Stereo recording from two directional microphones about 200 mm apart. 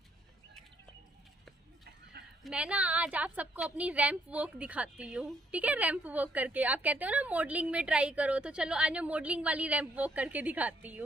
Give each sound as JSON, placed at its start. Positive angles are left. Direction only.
{"t": 2.4, "sound": "a woman's voice", "side_deg": -5}